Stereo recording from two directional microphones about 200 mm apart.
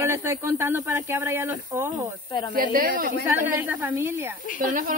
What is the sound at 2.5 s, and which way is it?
Speech, 45° right (ahead or behind).